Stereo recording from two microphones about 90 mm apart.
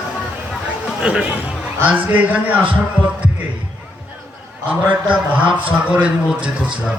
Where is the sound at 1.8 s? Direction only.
15° right (ahead or behind).